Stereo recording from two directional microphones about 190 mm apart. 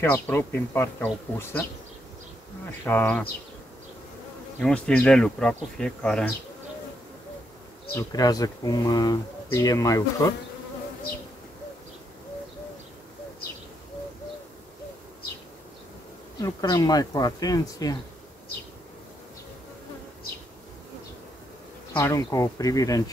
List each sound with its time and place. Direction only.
0.0 s speech: 10° left (ahead or behind)
2.8 s speech: 10° left (ahead or behind)
4.6 s speech: 5° left (ahead or behind)
7.9 s speech: 20° left (ahead or behind)
16.3 s speech: 20° left (ahead or behind)
21.9 s speech: 15° left (ahead or behind)